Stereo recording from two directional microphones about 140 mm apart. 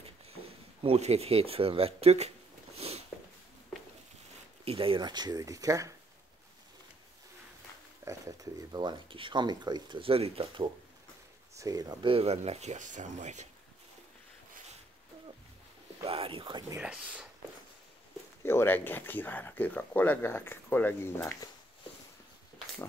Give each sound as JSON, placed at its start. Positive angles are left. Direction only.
{"t": 0.8, "sound": "speech", "side_deg": -50}
{"t": 2.8, "sound": "a sound", "side_deg": -45}
{"t": 4.6, "sound": "speech", "side_deg": -40}
{"t": 8.0, "sound": "speech", "side_deg": -25}
{"t": 11.5, "sound": "speech", "side_deg": -25}
{"t": 16.0, "sound": "speech", "side_deg": -40}
{"t": 16.8, "sound": "speech", "side_deg": -5}
{"t": 18.4, "sound": "speech", "side_deg": 15}